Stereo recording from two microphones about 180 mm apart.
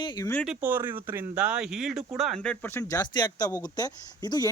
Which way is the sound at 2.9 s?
20° left (ahead or behind).